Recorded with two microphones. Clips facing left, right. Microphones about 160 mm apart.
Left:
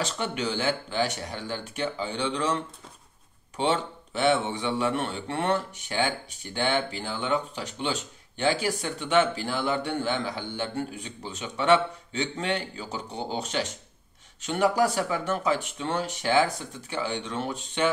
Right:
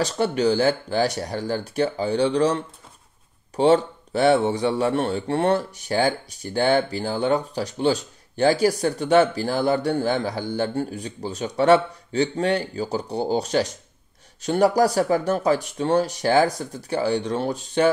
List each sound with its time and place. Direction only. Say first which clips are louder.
0.0 s a man's voice: right 9 dB; 35° right (ahead or behind)